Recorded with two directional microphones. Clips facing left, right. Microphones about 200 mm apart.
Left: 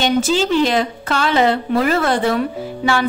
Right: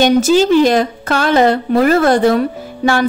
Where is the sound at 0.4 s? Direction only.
45° right (ahead or behind).